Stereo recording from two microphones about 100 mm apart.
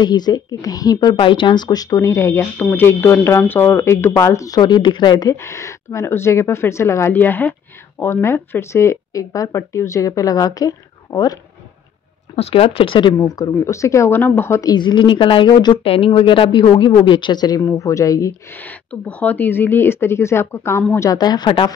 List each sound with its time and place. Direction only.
0.0 s a woman's voice: 45° left (ahead or behind)
4.6 s speech: 50° left (ahead or behind)
5.3 s a woman's voice: 30° left (ahead or behind)
12.4 s speech: 80° left; by 13.1 s 60° left (ahead or behind)
13.2 s speech: 40° left (ahead or behind); by 14.6 s 25° left (ahead or behind)
14.6 s speech: 45° left (ahead or behind)
15.8 s speech: 70° left (ahead or behind); by 17.6 s 45° left (ahead or behind)
17.6 s a woman's voice: 30° left (ahead or behind)
18.5 s speech: 15° left (ahead or behind); by 21.5 s 40° left (ahead or behind)